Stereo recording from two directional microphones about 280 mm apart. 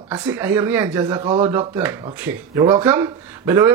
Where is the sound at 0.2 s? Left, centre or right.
Centre.